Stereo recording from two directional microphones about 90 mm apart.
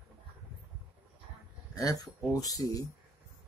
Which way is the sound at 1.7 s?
45° left (ahead or behind).